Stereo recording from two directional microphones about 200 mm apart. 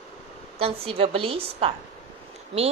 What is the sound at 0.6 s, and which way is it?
A woman's voice, 30° right (ahead or behind).